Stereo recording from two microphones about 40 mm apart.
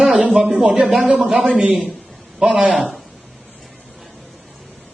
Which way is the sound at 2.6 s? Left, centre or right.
Right.